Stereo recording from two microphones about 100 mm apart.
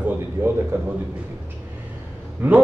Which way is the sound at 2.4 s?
20° right (ahead or behind).